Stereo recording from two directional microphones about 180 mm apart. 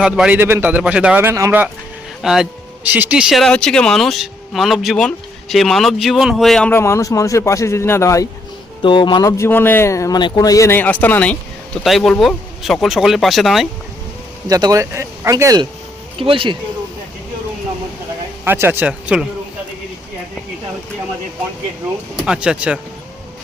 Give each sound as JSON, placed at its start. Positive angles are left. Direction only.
{"t": 0.0, "sound": "a man's voice", "side_deg": -5}
{"t": 2.2, "sound": "speech", "side_deg": 0}
{"t": 14.4, "sound": "a man's voice", "side_deg": -20}
{"t": 16.1, "sound": "speech", "side_deg": -30}
{"t": 18.4, "sound": "a man's voice", "side_deg": -15}
{"t": 22.1, "sound": "speech", "side_deg": -5}